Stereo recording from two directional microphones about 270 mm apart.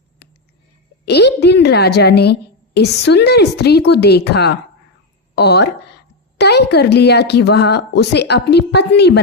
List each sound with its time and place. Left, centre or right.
1.0 s a woman's voice: left